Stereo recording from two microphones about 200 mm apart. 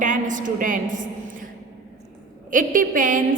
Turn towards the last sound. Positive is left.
turn(degrees=-40)  # may be behind; listen again after turning